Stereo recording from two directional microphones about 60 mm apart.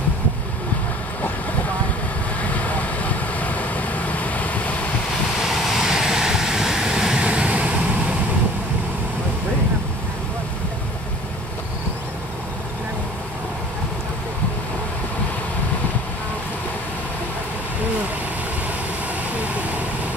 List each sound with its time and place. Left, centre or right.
2.4 s vehicle: left
5.4 s vehicle: centre
19.3 s vehicle: right